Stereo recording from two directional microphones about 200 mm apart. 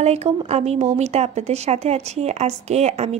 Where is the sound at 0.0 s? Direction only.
30° right (ahead or behind).